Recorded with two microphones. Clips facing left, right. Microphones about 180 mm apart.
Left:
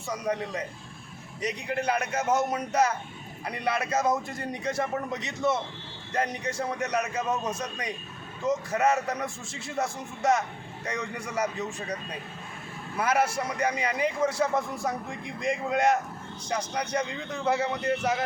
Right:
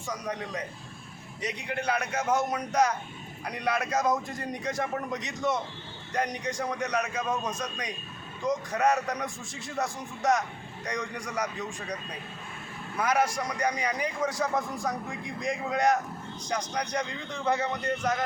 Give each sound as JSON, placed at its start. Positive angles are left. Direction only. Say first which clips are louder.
{"t": 0.3, "sound": "speech", "louder": "left 6 dB", "side_deg": 30}
{"t": 1.8, "sound": "a man's voice", "louder": "left 1 dB", "side_deg": 10}
{"t": 13.0, "sound": "a man's voice", "louder": "left 1 dB", "side_deg": 5}